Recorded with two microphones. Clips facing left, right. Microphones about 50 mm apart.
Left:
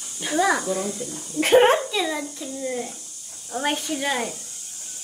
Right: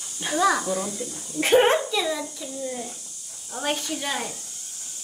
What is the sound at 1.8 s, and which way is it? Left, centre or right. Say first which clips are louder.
Speech: even; left.